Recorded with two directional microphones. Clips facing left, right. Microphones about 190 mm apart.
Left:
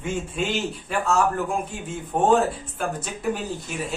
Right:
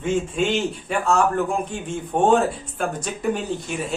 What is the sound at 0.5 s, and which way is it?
Speech, centre (ahead or behind).